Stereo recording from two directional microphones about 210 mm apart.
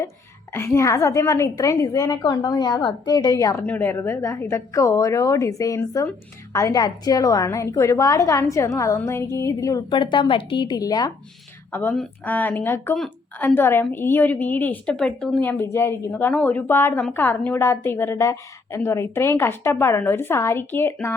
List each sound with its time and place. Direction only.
0.5 s a woman's voice: 10° left (ahead or behind)